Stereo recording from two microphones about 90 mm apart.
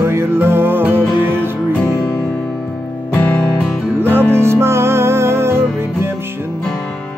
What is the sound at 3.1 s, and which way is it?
Music, 20° left (ahead or behind).